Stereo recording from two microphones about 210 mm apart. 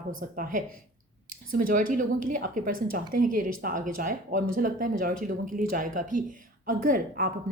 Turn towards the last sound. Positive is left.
turn(degrees=-40)  # may be behind; listen again after turning